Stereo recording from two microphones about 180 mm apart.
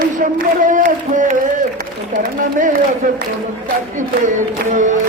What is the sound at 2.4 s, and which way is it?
Speech, 45° right (ahead or behind).